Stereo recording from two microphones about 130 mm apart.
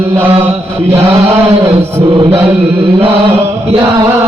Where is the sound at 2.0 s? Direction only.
45° right (ahead or behind).